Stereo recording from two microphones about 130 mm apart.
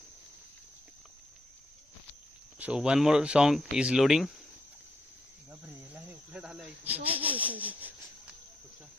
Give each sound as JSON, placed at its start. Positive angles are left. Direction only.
{"t": 2.6, "sound": "speech", "side_deg": -10}
{"t": 5.5, "sound": "snake", "side_deg": -15}